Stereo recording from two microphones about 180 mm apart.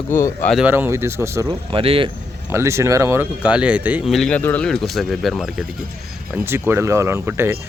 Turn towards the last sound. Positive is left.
turn(degrees=-15)  # may be behind; listen again after turning